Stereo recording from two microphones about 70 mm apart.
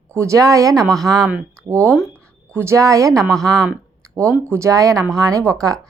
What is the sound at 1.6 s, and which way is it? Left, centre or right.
Speech, right.